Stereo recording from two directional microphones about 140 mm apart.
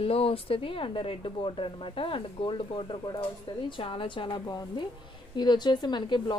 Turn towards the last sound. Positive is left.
turn(degrees=35)  # may be behind; listen again after turning